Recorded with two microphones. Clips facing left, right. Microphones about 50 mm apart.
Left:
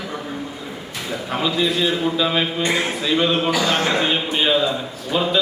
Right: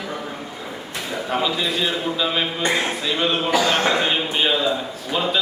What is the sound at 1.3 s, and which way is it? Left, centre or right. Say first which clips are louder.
A man's voice: left 2 dB; centre.